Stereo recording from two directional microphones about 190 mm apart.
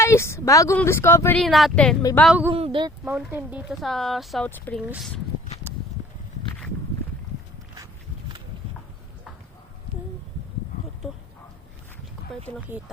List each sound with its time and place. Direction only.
0.0 s speech: 15° left (ahead or behind)
1.4 s speech: centre (ahead or behind)
2.5 s speech: 30° right (ahead or behind)
3.0 s speech: 5° right (ahead or behind)
4.4 s speech: 10° left (ahead or behind)
4.8 s speech: 5° right (ahead or behind)